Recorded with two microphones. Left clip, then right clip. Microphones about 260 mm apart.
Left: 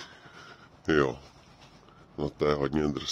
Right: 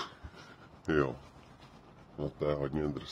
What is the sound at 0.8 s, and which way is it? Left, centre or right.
Speech, left.